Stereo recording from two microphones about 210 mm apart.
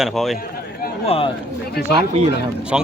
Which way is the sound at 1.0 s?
30° left (ahead or behind).